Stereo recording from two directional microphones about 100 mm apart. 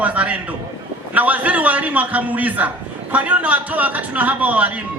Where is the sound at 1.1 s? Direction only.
15° right (ahead or behind).